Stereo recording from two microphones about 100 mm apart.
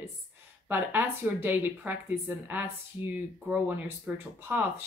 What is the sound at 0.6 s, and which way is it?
Speech, 20° right (ahead or behind).